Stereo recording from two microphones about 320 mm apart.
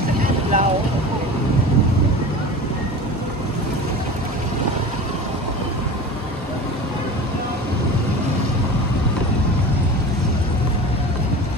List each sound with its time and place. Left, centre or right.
0.2 s vehicle: right